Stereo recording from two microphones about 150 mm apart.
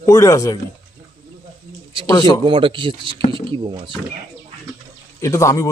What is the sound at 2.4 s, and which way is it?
Speech, 35° right (ahead or behind).